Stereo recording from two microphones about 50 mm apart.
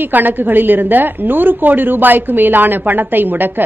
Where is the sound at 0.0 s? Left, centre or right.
Right.